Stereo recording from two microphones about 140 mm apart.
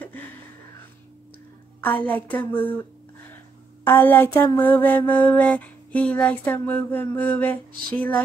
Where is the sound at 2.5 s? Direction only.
35° left (ahead or behind).